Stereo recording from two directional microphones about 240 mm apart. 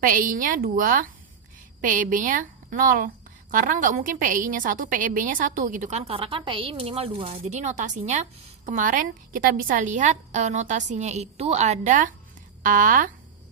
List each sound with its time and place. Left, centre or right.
0.0 s a woman's voice: right